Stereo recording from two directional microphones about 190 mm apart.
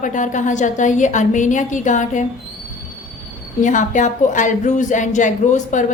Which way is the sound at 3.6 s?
40° left (ahead or behind).